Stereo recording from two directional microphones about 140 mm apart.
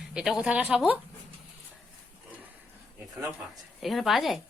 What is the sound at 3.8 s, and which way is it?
Speech, centre (ahead or behind).